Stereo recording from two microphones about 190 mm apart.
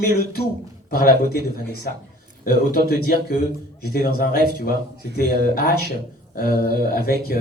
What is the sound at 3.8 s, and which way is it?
Mantra, 55° left (ahead or behind).